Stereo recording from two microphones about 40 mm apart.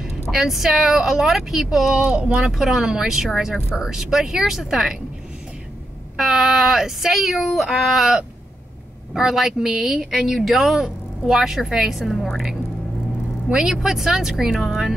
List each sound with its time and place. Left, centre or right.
0.3 s speech: centre
2.0 s speech: right
2.5 s speech: centre
6.1 s speech: centre
13.5 s speech: centre